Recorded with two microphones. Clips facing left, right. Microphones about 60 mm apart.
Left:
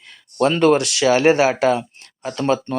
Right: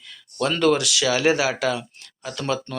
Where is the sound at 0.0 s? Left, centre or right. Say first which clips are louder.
Left 7 dB; left.